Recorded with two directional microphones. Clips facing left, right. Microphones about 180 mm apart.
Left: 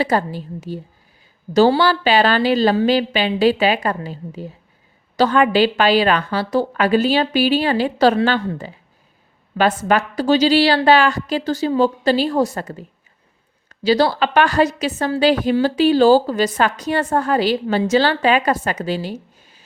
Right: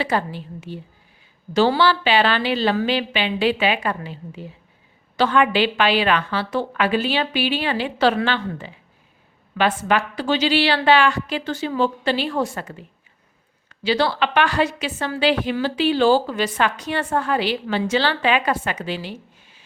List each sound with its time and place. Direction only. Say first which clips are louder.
0.0 s a woman's voice: left 4 dB; 40° left (ahead or behind)